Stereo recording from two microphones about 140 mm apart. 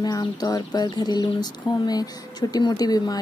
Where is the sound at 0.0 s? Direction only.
30° left (ahead or behind).